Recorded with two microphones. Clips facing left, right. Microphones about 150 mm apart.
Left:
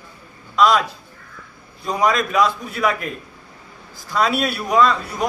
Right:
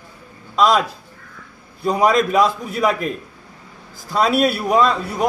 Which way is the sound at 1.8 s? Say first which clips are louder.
Right 3 dB; 30° right (ahead or behind).